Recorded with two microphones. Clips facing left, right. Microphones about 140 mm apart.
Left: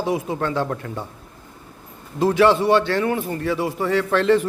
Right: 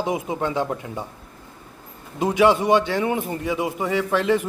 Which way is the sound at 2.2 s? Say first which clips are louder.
Left 2 dB; 15° right (ahead or behind).